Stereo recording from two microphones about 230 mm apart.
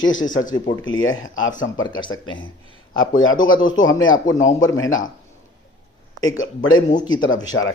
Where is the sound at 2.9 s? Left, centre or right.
Left.